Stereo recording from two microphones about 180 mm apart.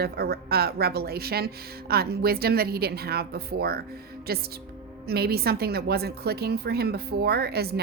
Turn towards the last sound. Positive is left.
turn(degrees=-60)  # may be behind; listen again after turning